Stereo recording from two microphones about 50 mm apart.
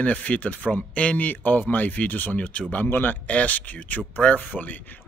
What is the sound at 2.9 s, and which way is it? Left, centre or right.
Speech, left.